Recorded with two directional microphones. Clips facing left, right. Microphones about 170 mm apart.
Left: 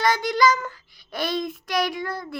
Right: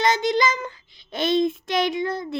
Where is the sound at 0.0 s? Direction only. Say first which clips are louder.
Even; 25° right (ahead or behind).